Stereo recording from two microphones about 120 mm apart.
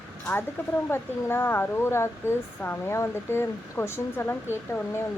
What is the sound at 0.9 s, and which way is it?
Speech, 20° left (ahead or behind).